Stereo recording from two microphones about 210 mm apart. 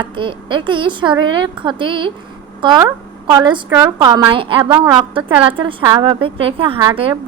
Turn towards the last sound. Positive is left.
turn(degrees=-25)  # may be behind; listen again after turning